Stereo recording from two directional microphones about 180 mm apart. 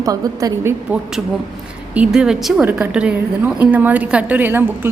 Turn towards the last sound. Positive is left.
turn(degrees=-10)  # may be behind; listen again after turning